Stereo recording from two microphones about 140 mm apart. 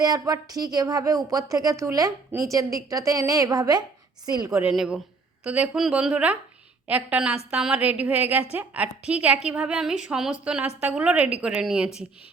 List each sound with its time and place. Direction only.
0.0 s speech: 25° right (ahead or behind)
4.7 s a woman's voice: 5° right (ahead or behind)